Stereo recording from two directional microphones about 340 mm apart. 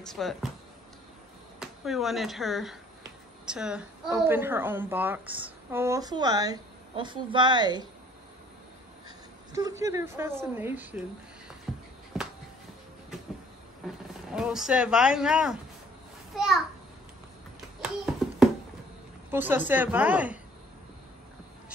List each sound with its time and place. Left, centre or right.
0.0 s speech: centre
1.6 s a woman's voice: centre
9.5 s a woman's voice: centre
11.7 s music: centre
12.1 s a sound: centre
14.3 s speech: centre
16.3 s a sound: centre
17.8 s a sound: centre
19.3 s speech: centre